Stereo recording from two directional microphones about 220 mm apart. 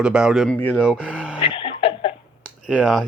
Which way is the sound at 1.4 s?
25° left (ahead or behind).